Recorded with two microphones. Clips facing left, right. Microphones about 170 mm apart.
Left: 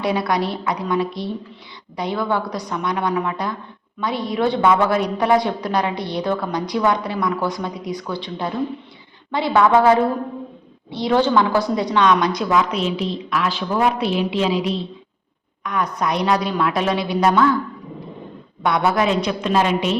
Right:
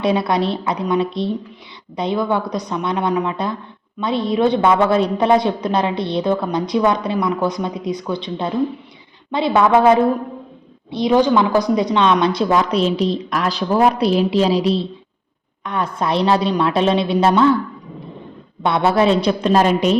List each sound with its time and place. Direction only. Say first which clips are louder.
0.0 s a man's voice: right 3 dB; 25° right (ahead or behind)
18.6 s a woman's voice: right 3 dB; 25° right (ahead or behind)